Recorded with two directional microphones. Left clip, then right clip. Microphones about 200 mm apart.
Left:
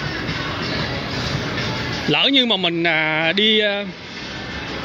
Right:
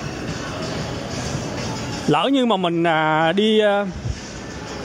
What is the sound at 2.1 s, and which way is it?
Speech, 15° right (ahead or behind).